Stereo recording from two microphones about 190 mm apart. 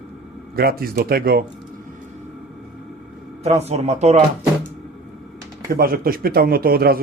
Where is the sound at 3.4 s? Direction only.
35° right (ahead or behind).